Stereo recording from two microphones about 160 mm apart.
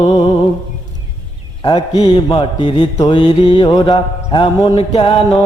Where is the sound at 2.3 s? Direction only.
30° left (ahead or behind).